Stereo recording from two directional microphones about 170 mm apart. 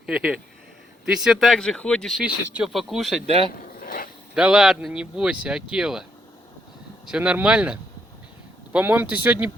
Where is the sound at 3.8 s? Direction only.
55° left (ahead or behind).